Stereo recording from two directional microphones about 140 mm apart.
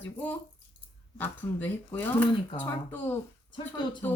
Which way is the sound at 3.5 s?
35° left (ahead or behind).